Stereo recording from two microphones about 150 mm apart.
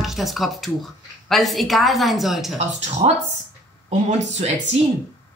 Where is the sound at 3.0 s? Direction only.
40° right (ahead or behind).